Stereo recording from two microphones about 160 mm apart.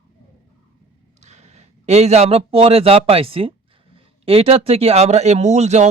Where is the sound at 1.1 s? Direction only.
45° right (ahead or behind).